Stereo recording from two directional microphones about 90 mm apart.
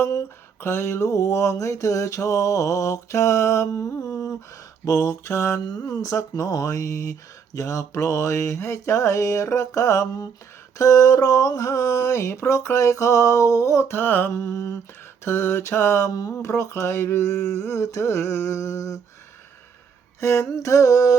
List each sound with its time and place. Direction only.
0.0 s speech: 35° left (ahead or behind)
4.9 s speech: 30° left (ahead or behind)
5.7 s speech: 45° left (ahead or behind)
20.2 s speech: 30° left (ahead or behind)